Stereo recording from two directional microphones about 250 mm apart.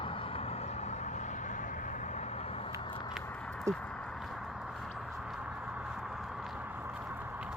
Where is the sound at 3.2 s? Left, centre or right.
Centre.